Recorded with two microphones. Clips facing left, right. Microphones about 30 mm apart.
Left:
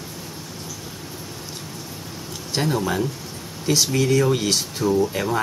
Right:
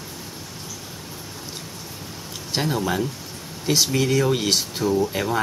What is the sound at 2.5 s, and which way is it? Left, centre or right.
Speech, centre.